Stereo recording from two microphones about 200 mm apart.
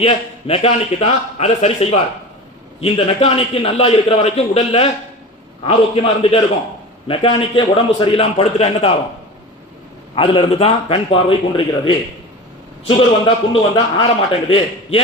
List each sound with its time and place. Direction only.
0.0 s a man's voice: 30° left (ahead or behind)
10.2 s a man's voice: 25° left (ahead or behind)